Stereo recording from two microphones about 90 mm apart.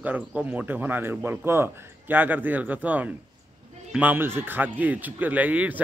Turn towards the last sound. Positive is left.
turn(degrees=-15)  # may be behind; listen again after turning